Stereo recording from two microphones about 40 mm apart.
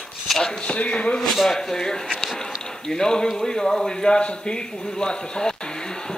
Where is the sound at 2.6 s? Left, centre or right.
Centre.